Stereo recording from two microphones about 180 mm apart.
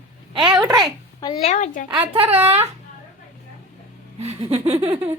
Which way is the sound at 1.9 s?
30° right (ahead or behind).